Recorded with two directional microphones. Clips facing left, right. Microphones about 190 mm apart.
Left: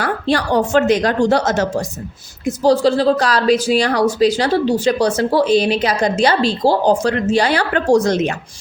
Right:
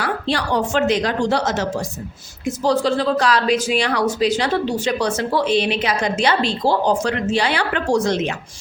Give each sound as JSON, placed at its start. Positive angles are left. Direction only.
{"t": 0.0, "sound": "a woman's voice", "side_deg": 45}
{"t": 2.6, "sound": "speech", "side_deg": 35}